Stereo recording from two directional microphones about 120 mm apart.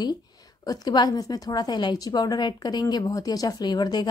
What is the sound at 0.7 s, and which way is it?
A woman's voice, 35° left (ahead or behind).